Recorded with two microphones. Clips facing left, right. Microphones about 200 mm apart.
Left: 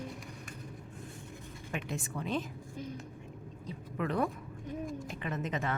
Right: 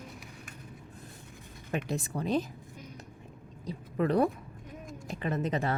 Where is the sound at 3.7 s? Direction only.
35° right (ahead or behind).